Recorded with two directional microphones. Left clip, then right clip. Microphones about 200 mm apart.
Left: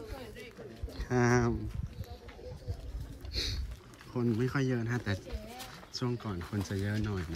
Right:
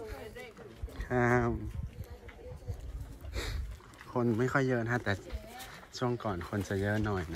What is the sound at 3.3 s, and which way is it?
Boat, 5° left (ahead or behind).